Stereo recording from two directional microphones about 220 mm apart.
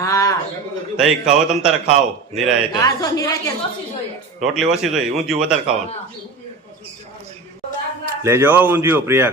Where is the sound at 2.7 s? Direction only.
15° left (ahead or behind).